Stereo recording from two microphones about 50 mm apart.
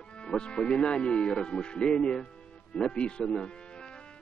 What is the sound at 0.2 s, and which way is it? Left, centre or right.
Speech, centre.